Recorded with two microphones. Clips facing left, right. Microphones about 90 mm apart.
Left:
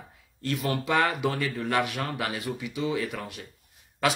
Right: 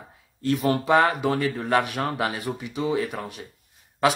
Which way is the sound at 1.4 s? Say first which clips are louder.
Right 4 dB; 20° right (ahead or behind).